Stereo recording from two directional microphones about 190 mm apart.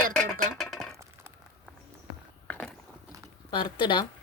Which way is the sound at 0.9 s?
15° right (ahead or behind).